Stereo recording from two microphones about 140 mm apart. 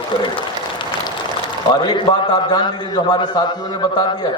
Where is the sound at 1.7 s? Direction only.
35° left (ahead or behind).